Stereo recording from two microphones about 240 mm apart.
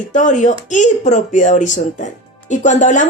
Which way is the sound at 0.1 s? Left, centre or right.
Left.